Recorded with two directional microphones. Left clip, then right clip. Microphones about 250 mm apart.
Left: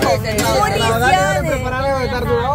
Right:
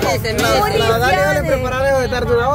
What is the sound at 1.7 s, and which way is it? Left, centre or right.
Vehicle, right.